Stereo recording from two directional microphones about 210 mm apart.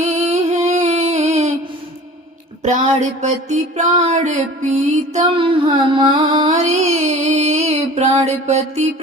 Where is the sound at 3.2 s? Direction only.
35° right (ahead or behind).